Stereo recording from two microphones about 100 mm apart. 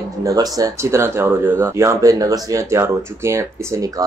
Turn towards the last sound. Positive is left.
turn(degrees=-35)  # may be behind; listen again after turning